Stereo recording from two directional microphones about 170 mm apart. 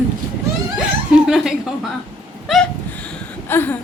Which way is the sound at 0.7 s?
5° right (ahead or behind).